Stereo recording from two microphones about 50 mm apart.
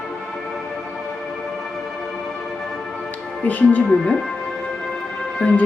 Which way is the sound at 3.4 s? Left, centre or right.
Left.